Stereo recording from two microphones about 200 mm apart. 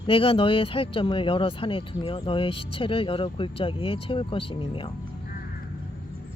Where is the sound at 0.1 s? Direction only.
25° left (ahead or behind).